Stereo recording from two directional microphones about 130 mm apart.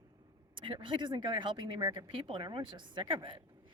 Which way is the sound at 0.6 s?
40° right (ahead or behind).